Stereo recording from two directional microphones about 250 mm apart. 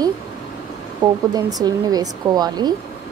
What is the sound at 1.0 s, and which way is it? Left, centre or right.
A woman's voice, centre.